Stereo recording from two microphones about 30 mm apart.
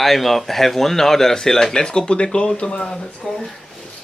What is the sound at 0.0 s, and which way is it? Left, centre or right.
Speech, centre.